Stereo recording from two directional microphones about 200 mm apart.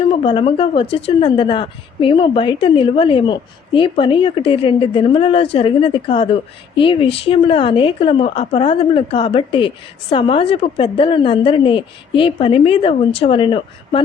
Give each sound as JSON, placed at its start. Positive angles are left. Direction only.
{"t": 0.1, "sound": "speech", "side_deg": 25}